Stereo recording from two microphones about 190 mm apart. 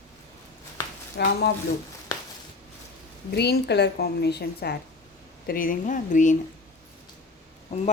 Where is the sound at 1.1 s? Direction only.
60° left (ahead or behind).